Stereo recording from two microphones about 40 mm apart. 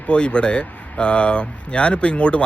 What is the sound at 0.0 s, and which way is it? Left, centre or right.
Speech, left.